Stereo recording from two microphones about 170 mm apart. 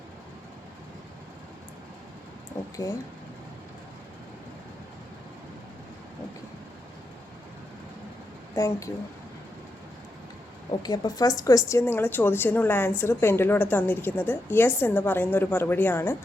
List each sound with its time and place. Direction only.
8.5 s speech: 20° left (ahead or behind)
10.8 s a woman's voice: 25° left (ahead or behind)